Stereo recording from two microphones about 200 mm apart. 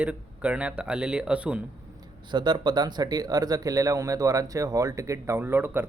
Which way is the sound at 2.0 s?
20° right (ahead or behind).